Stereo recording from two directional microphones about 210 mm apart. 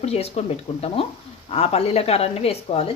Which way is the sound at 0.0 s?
30° left (ahead or behind).